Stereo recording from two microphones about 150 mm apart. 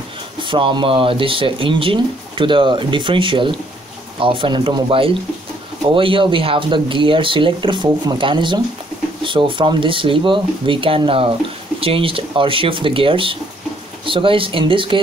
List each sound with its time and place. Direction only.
0.4 s speech: 35° right (ahead or behind)